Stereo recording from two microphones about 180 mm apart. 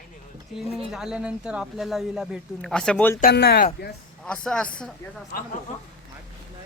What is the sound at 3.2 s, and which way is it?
Speech, 60° left (ahead or behind).